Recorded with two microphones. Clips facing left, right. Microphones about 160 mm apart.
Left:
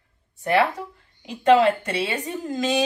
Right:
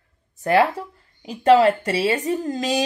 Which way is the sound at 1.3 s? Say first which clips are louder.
Right 2 dB; 35° right (ahead or behind).